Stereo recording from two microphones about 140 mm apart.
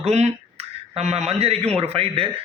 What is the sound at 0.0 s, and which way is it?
A man's voice, 50° right (ahead or behind).